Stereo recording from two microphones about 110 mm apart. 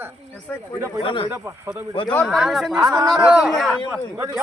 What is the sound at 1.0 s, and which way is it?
Speech, 50° left (ahead or behind).